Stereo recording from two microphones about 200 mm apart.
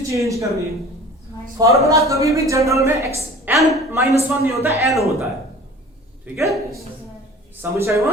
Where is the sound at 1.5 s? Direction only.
15° right (ahead or behind).